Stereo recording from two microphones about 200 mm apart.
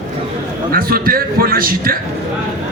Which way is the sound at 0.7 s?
45° right (ahead or behind).